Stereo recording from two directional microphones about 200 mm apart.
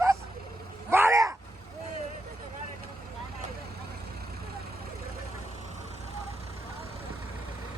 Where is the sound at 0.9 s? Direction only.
10° right (ahead or behind).